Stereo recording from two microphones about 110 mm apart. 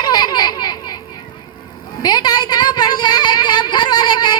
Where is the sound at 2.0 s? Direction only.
40° left (ahead or behind).